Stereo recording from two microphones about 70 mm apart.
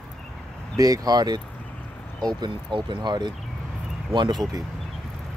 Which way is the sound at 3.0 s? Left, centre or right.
Right.